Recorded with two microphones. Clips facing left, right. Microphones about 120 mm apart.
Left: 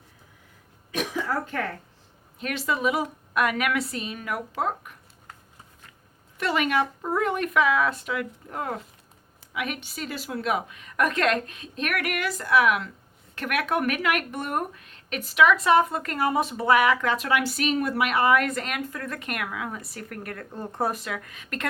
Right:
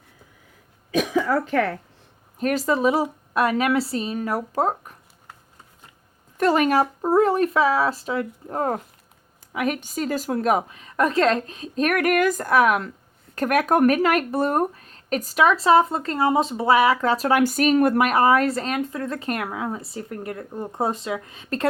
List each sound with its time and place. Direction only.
1.1 s speech: 90° right
2.4 s speech: 40° right (ahead or behind)
6.3 s speech: 40° right (ahead or behind)